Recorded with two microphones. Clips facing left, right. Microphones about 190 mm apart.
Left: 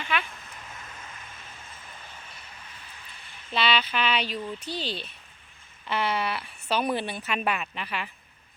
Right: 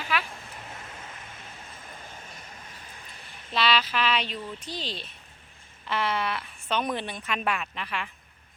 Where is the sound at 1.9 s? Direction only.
45° right (ahead or behind).